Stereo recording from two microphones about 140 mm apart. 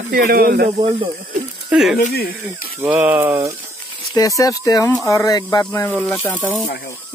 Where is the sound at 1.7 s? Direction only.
5° right (ahead or behind).